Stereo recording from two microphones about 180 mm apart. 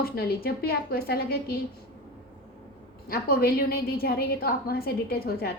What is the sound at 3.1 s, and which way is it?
A woman's voice, 55° left (ahead or behind).